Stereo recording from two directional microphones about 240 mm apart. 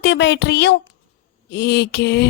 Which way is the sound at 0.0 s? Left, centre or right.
Left.